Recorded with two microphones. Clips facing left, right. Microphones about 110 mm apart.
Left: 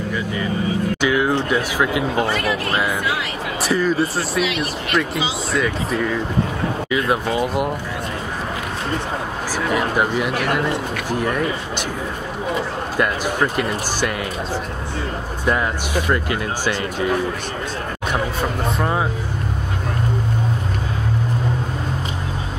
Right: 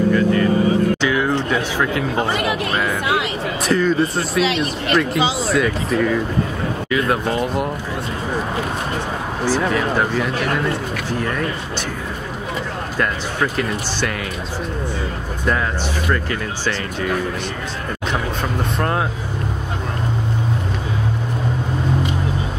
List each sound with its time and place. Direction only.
0.1 s speech: 5° left (ahead or behind)
1.0 s a sound: 10° left (ahead or behind)
2.2 s speech: 20° right (ahead or behind)
3.6 s speech: centre (ahead or behind)
4.5 s speech: 30° right (ahead or behind)
5.5 s speech: centre (ahead or behind)
9.5 s speech: 10° left (ahead or behind)
12.9 s speech: 10° left (ahead or behind)
15.4 s speech: 15° left (ahead or behind)
18.8 s speech: 5° left (ahead or behind)